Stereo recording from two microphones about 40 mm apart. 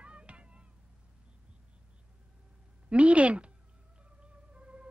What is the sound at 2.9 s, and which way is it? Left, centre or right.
Speech, right.